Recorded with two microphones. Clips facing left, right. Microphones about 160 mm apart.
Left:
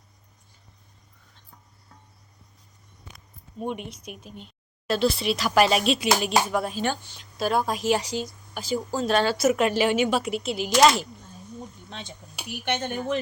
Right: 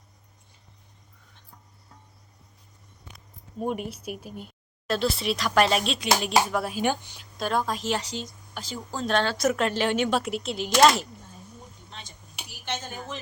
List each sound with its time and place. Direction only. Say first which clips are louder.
3.6 s speech: right 2 dB; 5° right (ahead or behind)
7.3 s a woman's voice: left 2 dB; 5° left (ahead or behind)
11.9 s speech: left 6 dB; 65° left (ahead or behind)